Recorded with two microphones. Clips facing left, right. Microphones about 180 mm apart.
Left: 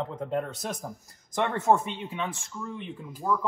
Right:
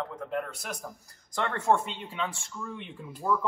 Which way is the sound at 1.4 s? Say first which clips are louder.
Left 2 dB; 20° left (ahead or behind).